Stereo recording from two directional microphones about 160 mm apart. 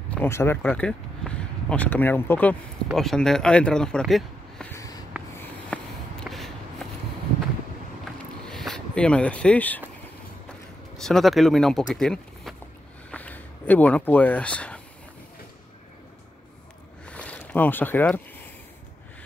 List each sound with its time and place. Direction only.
0.1 s speech: 15° left (ahead or behind)
4.7 s writing: 20° left (ahead or behind)
5.4 s a sound: 5° left (ahead or behind)
8.5 s speech: 5° left (ahead or behind)
11.0 s speech: centre (ahead or behind)
17.0 s a sound: 10° left (ahead or behind)